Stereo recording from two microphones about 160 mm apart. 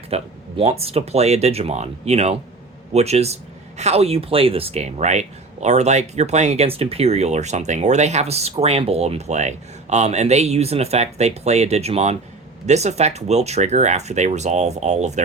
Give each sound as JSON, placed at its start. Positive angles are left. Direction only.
{"t": 0.1, "sound": "speech", "side_deg": -40}